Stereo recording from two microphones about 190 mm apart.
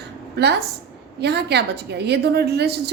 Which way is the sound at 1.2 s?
60° right (ahead or behind).